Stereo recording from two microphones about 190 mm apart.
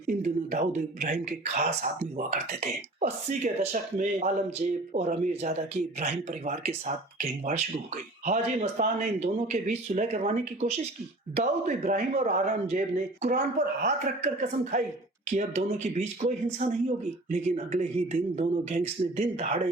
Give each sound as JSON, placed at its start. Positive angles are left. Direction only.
{"t": 0.1, "sound": "speech", "side_deg": -40}